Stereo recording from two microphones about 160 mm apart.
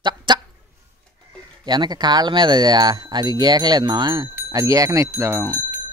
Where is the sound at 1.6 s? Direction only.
25° right (ahead or behind).